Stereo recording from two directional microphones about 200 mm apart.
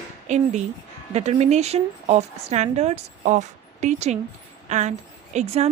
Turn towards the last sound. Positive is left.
turn(degrees=-35)  # may be behind; listen again after turning